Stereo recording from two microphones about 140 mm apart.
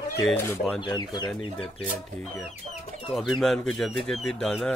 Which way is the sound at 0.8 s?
30° left (ahead or behind).